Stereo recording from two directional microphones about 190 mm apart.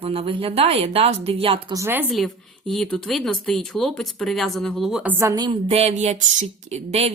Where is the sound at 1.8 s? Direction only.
10° right (ahead or behind).